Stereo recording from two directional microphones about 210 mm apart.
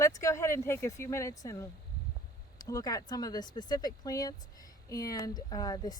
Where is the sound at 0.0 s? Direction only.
15° left (ahead or behind).